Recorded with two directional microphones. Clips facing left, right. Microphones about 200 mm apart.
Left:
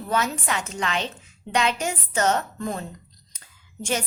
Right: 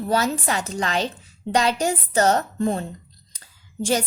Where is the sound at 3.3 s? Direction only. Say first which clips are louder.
Right 2 dB; 35° right (ahead or behind).